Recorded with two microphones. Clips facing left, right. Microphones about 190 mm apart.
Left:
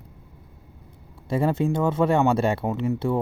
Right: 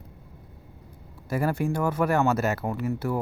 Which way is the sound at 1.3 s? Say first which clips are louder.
Left 3 dB; 25° left (ahead or behind).